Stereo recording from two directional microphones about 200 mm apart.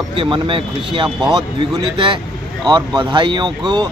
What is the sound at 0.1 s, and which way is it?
Speech, 25° right (ahead or behind).